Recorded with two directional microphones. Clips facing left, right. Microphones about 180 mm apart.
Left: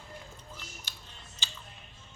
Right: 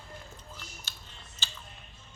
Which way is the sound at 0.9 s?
15° left (ahead or behind).